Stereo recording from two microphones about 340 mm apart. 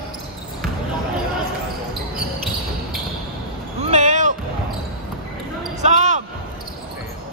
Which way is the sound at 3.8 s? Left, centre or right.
Right.